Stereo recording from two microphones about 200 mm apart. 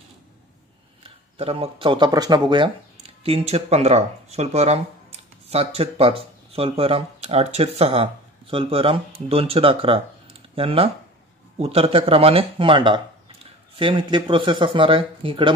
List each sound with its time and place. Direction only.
1.4 s speech: 30° right (ahead or behind)